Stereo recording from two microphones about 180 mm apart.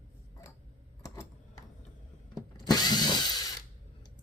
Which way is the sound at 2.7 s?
20° left (ahead or behind).